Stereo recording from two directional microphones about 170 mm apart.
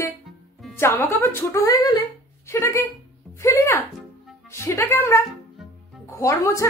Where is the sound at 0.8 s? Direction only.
15° left (ahead or behind).